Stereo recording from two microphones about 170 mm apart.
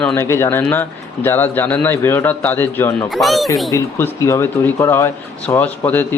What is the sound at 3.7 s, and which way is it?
Speech, 15° left (ahead or behind).